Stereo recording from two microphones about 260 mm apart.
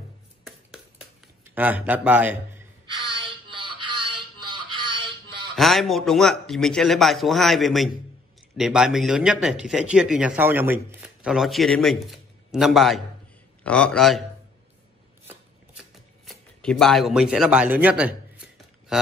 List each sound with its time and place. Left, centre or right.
0.4 s finger snapping: centre
1.5 s a man's voice: centre
3.2 s synthetic singing: centre
4.0 s music: centre
5.6 s speech: centre
16.3 s speech: centre